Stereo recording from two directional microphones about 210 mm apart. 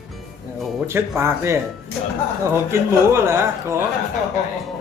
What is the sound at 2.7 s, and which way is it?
A man's voice, 10° right (ahead or behind).